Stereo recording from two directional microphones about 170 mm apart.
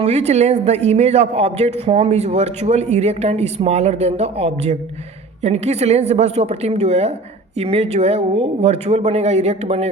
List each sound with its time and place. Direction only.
0.0 s a man's voice: 40° right (ahead or behind)